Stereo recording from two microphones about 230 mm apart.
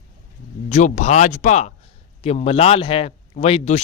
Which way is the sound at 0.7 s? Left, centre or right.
Left.